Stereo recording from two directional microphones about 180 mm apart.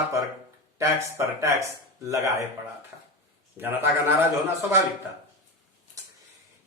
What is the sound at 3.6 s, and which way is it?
Speech, 10° right (ahead or behind).